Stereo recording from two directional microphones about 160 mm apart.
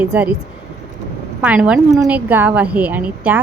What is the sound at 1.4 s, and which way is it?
A woman's voice, 10° right (ahead or behind).